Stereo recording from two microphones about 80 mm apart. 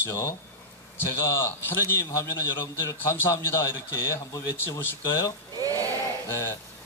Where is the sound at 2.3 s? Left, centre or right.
Left.